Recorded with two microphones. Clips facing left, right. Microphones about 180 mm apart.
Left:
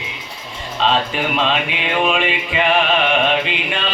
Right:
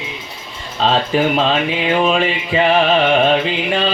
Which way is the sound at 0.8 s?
40° right (ahead or behind).